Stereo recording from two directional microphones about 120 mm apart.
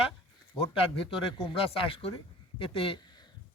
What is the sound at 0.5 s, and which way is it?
Speech, 50° left (ahead or behind).